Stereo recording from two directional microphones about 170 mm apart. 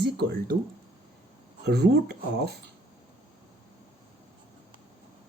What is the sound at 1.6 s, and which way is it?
Speech, 75° right (ahead or behind).